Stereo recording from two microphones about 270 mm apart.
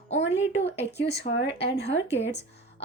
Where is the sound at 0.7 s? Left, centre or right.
Left.